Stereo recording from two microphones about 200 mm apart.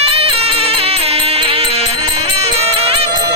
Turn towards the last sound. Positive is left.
turn(degrees=-30)  # may be behind; listen again after turning